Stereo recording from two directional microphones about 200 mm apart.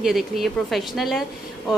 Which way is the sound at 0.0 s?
Centre (ahead or behind).